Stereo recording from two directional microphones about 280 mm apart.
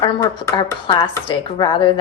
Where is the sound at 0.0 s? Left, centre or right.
Centre.